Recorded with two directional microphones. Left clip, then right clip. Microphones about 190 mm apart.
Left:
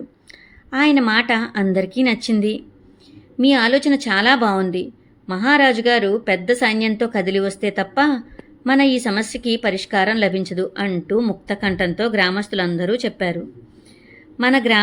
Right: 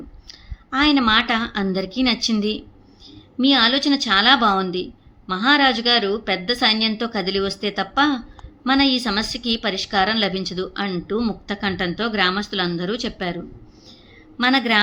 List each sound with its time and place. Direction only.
0.3 s a woman's voice: 20° left (ahead or behind)